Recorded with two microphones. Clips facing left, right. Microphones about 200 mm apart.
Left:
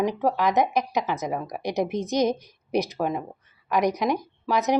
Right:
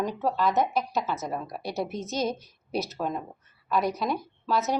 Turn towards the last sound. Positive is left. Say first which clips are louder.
# left 4 dB
turn(degrees=15)  # may be behind; listen again after turning